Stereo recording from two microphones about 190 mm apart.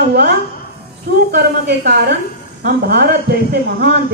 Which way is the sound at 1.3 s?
60° right (ahead or behind).